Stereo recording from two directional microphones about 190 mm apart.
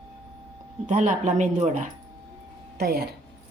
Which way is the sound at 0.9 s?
40° right (ahead or behind).